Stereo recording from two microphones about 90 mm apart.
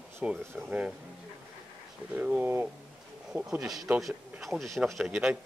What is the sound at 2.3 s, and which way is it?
Speech, 25° right (ahead or behind).